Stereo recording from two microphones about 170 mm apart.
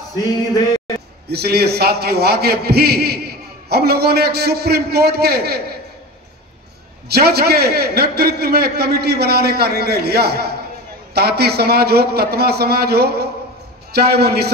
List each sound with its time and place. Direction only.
0.1 s a sound: 20° left (ahead or behind)
1.3 s a man's voice: 70° right (ahead or behind)
7.1 s a man's voice: 65° right (ahead or behind)